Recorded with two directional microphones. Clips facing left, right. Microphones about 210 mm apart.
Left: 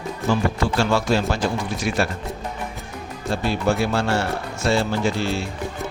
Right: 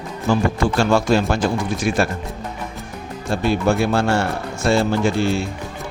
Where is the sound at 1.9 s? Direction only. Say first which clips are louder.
Right 3 dB; 50° right (ahead or behind).